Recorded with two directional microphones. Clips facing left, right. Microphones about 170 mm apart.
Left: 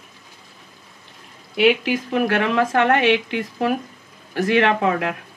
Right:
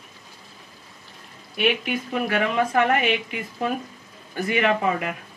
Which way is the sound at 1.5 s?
85° left.